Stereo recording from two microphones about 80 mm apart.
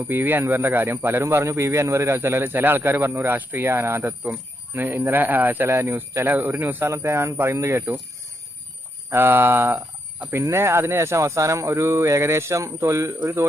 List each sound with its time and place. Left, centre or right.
0.0 s speech: right
9.0 s speech: right